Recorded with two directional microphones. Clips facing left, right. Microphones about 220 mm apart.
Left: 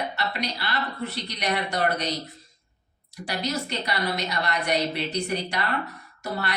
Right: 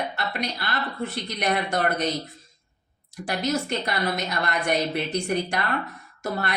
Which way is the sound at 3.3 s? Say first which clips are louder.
Right 4 dB; 50° right (ahead or behind).